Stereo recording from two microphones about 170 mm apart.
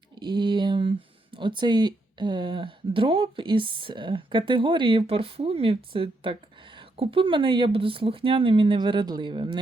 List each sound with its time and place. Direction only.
0.2 s speech: 25° right (ahead or behind)